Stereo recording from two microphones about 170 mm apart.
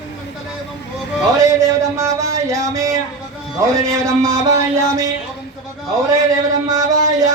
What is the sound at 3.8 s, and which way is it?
Speech, 20° right (ahead or behind).